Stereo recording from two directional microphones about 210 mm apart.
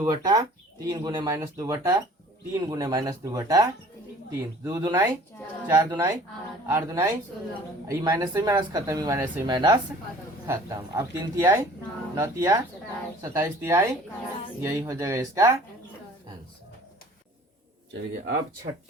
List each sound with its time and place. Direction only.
0.0 s speech: 20° right (ahead or behind)